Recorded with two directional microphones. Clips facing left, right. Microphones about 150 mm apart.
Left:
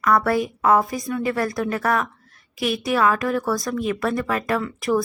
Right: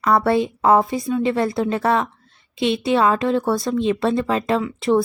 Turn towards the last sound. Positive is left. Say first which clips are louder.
# right 3 dB
turn(degrees=-25)  # may be behind; listen again after turning